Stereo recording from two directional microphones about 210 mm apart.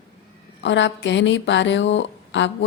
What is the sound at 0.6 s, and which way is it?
A woman's voice, 60° left (ahead or behind).